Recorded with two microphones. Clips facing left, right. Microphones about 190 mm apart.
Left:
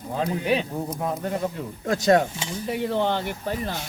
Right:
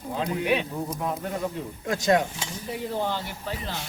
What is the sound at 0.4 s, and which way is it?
Speech, 35° left (ahead or behind).